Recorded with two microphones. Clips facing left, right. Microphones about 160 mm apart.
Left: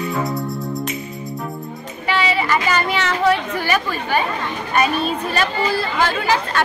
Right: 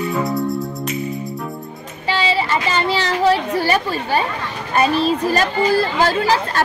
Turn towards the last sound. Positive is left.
turn(degrees=-35)  # may be behind; listen again after turning